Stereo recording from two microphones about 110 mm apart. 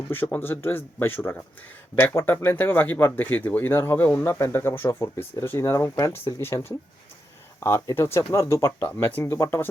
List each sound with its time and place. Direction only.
0.1 s speech: 15° left (ahead or behind)